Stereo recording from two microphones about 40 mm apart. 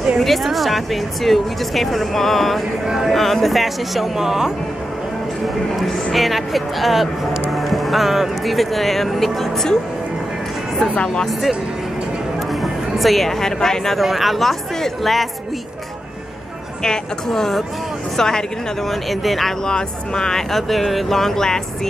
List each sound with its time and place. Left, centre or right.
0.2 s speech: centre
6.1 s speech: centre
12.6 s speech: centre
13.9 s speech: centre
16.8 s speech: centre
18.9 s speech: centre
19.6 s speech: centre
20.5 s speech: centre